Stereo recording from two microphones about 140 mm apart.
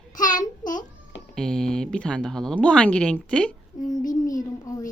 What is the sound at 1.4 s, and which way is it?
Speech, 5° left (ahead or behind).